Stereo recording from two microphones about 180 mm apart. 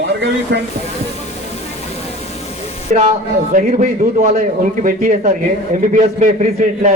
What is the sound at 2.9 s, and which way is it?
A man's voice, 45° right (ahead or behind).